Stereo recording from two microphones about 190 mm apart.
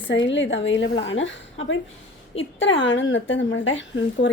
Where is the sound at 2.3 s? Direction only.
80° left.